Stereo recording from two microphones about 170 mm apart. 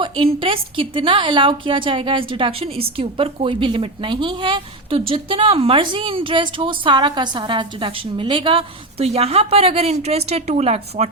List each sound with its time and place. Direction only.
0.0 s a woman's voice: 30° right (ahead or behind)